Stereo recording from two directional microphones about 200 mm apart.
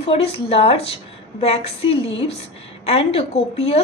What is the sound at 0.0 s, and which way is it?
A woman's voice, 30° left (ahead or behind).